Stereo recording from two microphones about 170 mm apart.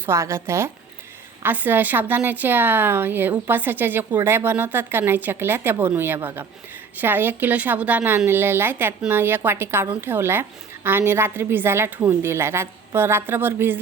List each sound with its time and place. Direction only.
0.0 s a woman's voice: 15° right (ahead or behind)